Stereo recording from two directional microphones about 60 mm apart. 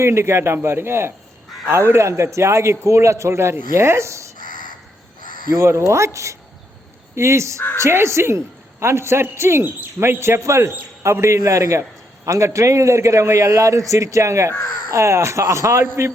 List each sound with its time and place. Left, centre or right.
0.0 s a man's voice: right
5.5 s a man's voice: right
7.2 s a man's voice: right